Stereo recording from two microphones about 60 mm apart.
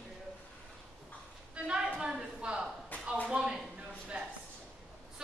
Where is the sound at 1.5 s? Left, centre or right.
Centre.